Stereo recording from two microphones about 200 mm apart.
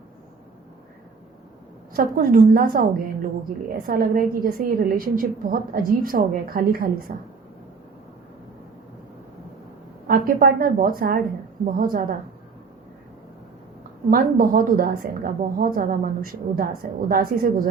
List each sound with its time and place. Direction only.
1.9 s a woman's voice: 45° right (ahead or behind)
10.1 s a woman's voice: 45° right (ahead or behind)
14.1 s a woman's voice: 45° right (ahead or behind)